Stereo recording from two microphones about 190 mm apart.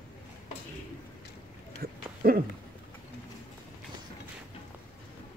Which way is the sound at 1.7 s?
50° right (ahead or behind).